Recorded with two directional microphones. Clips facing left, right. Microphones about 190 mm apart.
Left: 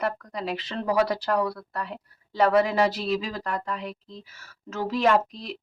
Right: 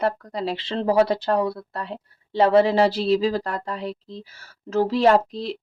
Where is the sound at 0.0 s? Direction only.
30° right (ahead or behind).